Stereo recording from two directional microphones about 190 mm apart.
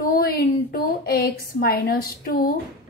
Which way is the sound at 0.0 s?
50° left (ahead or behind).